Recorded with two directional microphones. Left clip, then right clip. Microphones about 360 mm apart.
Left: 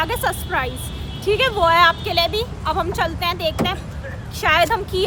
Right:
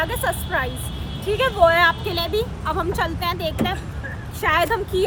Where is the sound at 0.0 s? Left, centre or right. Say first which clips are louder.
Left 2 dB; centre.